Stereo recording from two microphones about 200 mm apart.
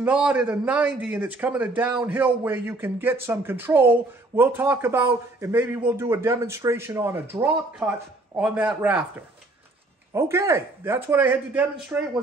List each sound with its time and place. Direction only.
0.0 s a man's voice: 5° right (ahead or behind)
10.1 s a man's voice: 15° right (ahead or behind)